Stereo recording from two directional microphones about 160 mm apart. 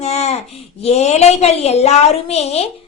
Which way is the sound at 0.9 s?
40° left (ahead or behind).